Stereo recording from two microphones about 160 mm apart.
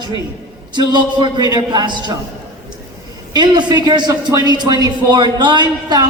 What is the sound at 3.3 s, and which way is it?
Speech, 25° right (ahead or behind).